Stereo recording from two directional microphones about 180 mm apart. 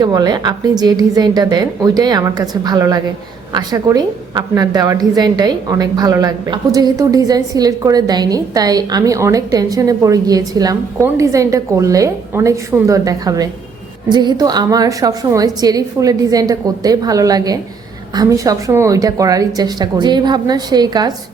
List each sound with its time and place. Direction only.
0.0 s a woman's voice: 20° right (ahead or behind)